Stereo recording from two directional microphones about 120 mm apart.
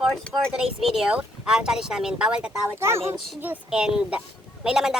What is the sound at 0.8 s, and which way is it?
Speech, 5° right (ahead or behind).